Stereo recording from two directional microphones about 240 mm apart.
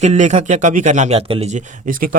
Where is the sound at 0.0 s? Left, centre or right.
Right.